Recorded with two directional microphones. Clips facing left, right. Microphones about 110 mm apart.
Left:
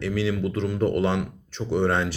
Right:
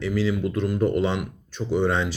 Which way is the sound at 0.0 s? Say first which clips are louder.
Right 1 dB; 65° left (ahead or behind).